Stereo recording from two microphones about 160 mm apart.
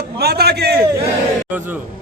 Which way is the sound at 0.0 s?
80° right.